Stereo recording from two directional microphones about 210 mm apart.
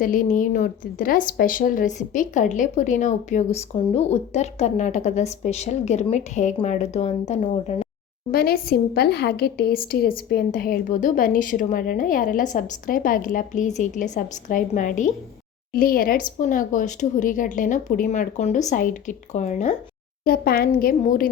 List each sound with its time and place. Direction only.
0.0 s a woman's voice: 40° left (ahead or behind)
8.3 s a woman's voice: 45° left (ahead or behind)
20.2 s a woman's voice: 45° left (ahead or behind)